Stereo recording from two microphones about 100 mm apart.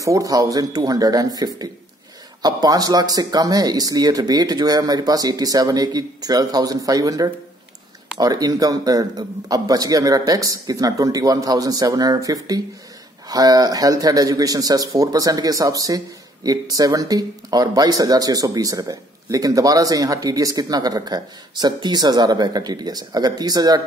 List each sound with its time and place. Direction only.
0.0 s speech: 35° right (ahead or behind)